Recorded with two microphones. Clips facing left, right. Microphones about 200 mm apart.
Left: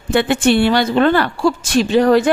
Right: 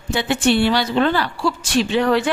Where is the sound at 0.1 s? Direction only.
55° left (ahead or behind).